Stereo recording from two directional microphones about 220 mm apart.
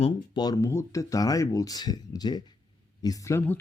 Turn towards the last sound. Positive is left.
turn(degrees=10)  # may be behind; listen again after turning